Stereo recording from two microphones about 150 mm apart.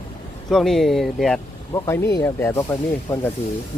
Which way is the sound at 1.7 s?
20° left (ahead or behind).